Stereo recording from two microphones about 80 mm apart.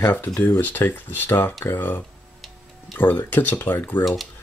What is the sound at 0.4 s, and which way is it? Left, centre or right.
Speech, left.